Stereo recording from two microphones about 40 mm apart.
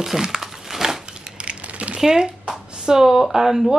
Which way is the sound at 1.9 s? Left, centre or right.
Centre.